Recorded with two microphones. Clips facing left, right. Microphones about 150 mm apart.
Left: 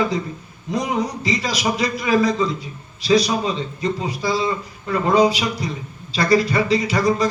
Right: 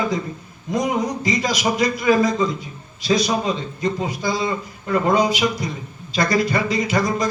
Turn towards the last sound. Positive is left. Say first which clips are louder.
# left 2 dB
turn(degrees=-45)  # may be behind; listen again after turning